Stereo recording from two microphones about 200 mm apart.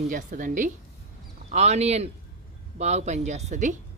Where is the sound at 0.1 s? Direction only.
40° right (ahead or behind).